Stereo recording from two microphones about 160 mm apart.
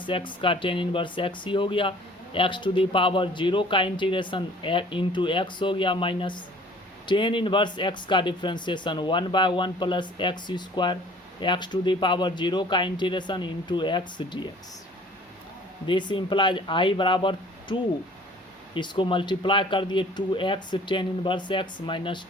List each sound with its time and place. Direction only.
0.0 s speech: 30° left (ahead or behind)
15.9 s speech: 30° left (ahead or behind)